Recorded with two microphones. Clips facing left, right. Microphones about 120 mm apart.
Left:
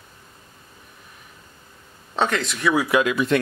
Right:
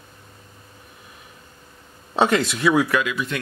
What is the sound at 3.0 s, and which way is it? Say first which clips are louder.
Speech: left 6 dB; 45° left (ahead or behind).